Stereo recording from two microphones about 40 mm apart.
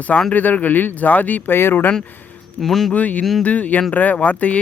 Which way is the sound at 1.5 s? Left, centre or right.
Left.